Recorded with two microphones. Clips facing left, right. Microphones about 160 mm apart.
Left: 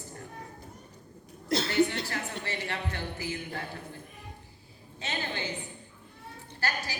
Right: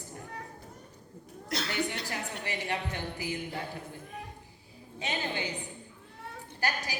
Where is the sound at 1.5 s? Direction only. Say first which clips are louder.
Left 6 dB; 30° left (ahead or behind).